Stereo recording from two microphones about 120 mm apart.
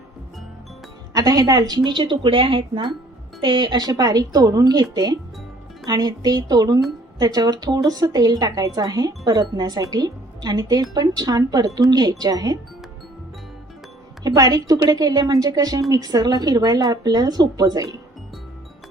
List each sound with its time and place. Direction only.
1.1 s a woman's voice: 30° right (ahead or behind)
14.3 s a woman's voice: 35° right (ahead or behind)